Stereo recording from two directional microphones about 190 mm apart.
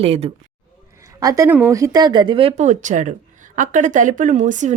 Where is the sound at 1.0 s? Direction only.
20° right (ahead or behind).